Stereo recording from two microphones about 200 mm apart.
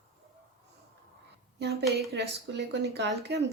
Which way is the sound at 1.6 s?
55° right (ahead or behind).